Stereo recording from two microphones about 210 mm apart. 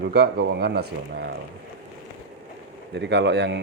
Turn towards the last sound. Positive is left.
turn(degrees=-55)  # may be behind; listen again after turning